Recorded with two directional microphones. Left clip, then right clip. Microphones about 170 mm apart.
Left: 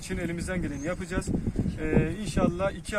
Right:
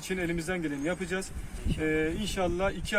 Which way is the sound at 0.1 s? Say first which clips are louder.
Right 1 dB; centre (ahead or behind).